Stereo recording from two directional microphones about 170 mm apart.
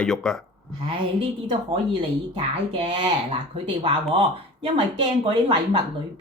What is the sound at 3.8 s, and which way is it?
A woman's voice, 30° right (ahead or behind).